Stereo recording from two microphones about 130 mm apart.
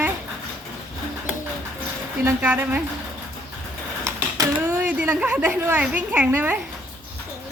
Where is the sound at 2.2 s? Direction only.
15° right (ahead or behind).